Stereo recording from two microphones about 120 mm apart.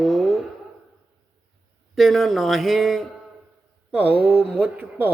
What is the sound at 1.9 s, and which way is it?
Mantra, centre (ahead or behind).